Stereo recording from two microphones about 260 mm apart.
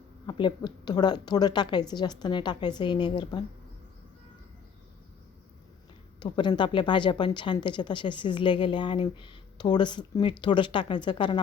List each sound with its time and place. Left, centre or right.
0.3 s a woman's voice: centre
6.1 s a woman's voice: centre